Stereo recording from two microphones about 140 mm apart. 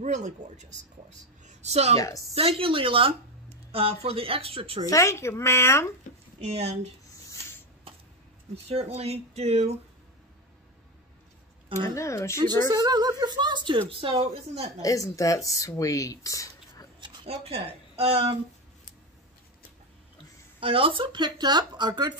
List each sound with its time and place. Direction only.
0.0 s speech: 60° right (ahead or behind)
1.4 s a sound: 55° right (ahead or behind)
2.0 s speech: 25° left (ahead or behind)
2.3 s speech: 40° right (ahead or behind)
4.8 s speech: 20° left (ahead or behind)
6.4 s speech: 50° right (ahead or behind)
8.6 s speech: 45° right (ahead or behind)
11.9 s speech: 20° left (ahead or behind)
12.7 s speech: 30° right (ahead or behind); by 14.7 s 45° right (ahead or behind)
14.8 s speech: 25° left (ahead or behind)
17.0 s speech: 40° right (ahead or behind)
20.6 s speech: 40° right (ahead or behind)